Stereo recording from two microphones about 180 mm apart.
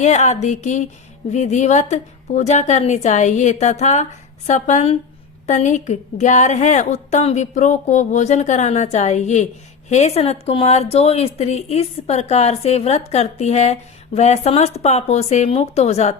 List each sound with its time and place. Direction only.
0.0 s speech: 40° left (ahead or behind)